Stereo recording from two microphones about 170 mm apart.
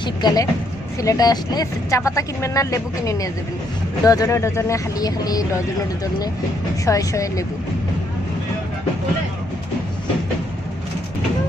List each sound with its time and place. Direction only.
0.0 s speech: 25° left (ahead or behind)
6.8 s speech: 20° left (ahead or behind)